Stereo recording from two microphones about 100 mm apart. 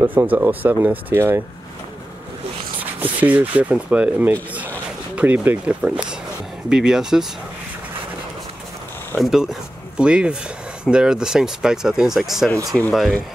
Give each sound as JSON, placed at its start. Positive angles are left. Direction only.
{"t": 0.0, "sound": "speech", "side_deg": -20}
{"t": 2.8, "sound": "speech", "side_deg": -15}
{"t": 9.2, "sound": "speech", "side_deg": -5}